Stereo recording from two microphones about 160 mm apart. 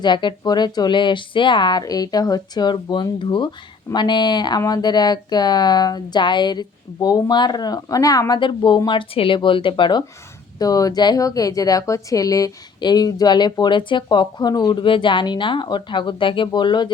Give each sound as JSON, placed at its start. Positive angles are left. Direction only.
{"t": 0.0, "sound": "speech", "side_deg": 30}